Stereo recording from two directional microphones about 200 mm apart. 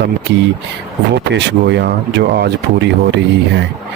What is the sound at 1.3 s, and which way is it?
Speech, 60° right (ahead or behind).